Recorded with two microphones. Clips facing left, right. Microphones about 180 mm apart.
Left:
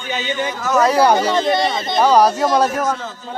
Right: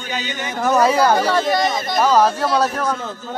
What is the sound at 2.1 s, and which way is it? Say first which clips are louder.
Speech: left 3 dB; 15° left (ahead or behind).